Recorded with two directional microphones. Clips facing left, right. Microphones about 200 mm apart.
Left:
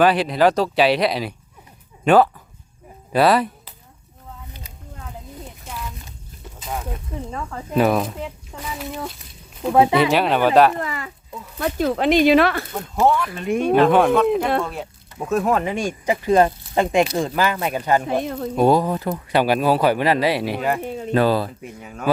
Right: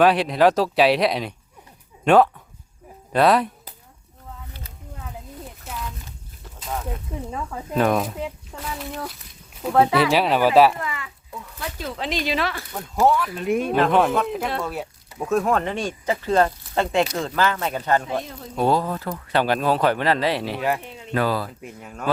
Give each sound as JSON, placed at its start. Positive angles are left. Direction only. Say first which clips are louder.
{"t": 0.0, "sound": "speech", "louder": "even", "side_deg": 0}
{"t": 5.6, "sound": "a sound", "louder": "even", "side_deg": 5}
{"t": 7.3, "sound": "speech", "louder": "right 1 dB", "side_deg": -10}
{"t": 7.7, "sound": "speech", "louder": "left 2 dB", "side_deg": 5}
{"t": 9.7, "sound": "speech", "louder": "left 2 dB", "side_deg": 15}
{"t": 10.0, "sound": "speech", "louder": "left 1 dB", "side_deg": 0}
{"t": 10.8, "sound": "speech", "louder": "left 4 dB", "side_deg": 40}
{"t": 11.6, "sound": "speech", "louder": "left 11 dB", "side_deg": 55}
{"t": 13.1, "sound": "speech", "louder": "even", "side_deg": 0}
{"t": 20.6, "sound": "speech", "louder": "left 2 dB", "side_deg": 0}
{"t": 20.8, "sound": "speech", "louder": "left 11 dB", "side_deg": 45}
{"t": 21.1, "sound": "speech", "louder": "left 5 dB", "side_deg": 30}
{"t": 21.6, "sound": "speech", "louder": "left 3 dB", "side_deg": 0}